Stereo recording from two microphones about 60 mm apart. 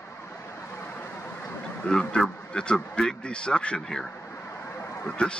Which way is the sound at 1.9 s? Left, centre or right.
Centre.